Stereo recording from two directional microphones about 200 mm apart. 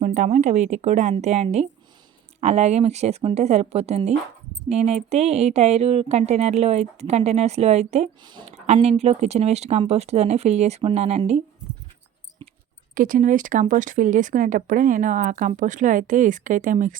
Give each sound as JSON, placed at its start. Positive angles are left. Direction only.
{"t": 0.0, "sound": "speech", "side_deg": -35}
{"t": 8.2, "sound": "speech", "side_deg": -20}
{"t": 8.6, "sound": "speech", "side_deg": -35}
{"t": 12.9, "sound": "speech", "side_deg": -45}